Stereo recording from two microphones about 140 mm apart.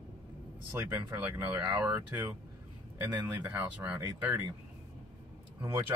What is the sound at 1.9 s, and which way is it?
Speech, 15° right (ahead or behind).